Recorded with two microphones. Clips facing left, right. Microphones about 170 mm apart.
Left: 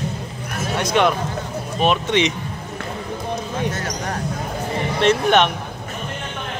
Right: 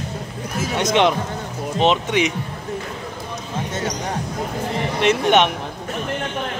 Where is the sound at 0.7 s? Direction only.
20° right (ahead or behind).